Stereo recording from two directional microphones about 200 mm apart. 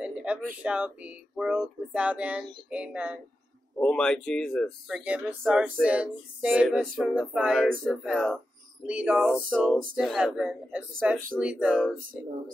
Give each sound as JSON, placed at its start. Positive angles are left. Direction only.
{"t": 0.0, "sound": "speech", "side_deg": -5}
{"t": 3.8, "sound": "speech", "side_deg": 5}
{"t": 11.3, "sound": "a sound", "side_deg": -5}